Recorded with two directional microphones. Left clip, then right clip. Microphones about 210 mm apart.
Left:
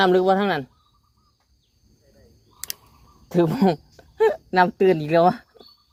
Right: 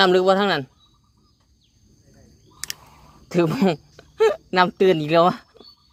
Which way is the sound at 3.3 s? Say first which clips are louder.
Even; 10° right (ahead or behind).